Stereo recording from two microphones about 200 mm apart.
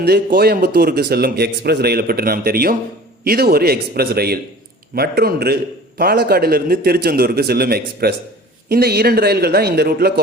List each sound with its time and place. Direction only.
0.0 s a man's voice: 55° right (ahead or behind)